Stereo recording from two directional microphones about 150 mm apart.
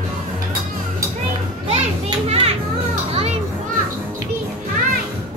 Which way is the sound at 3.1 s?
45° right (ahead or behind).